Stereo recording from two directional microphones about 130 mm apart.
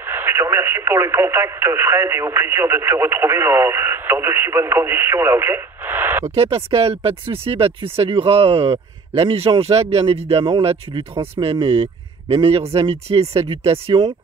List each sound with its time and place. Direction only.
0.0 s speech: 15° right (ahead or behind)
6.3 s speech: 50° right (ahead or behind)